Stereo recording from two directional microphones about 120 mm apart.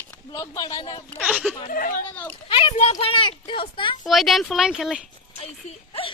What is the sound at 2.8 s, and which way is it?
Speech, 60° left (ahead or behind).